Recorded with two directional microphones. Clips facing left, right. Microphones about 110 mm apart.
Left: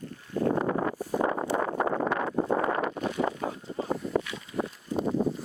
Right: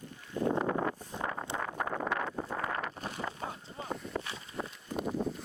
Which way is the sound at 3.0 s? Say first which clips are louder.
Left 9 dB; 35° left (ahead or behind).